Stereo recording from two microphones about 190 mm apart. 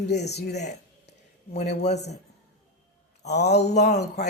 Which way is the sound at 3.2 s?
60° left (ahead or behind).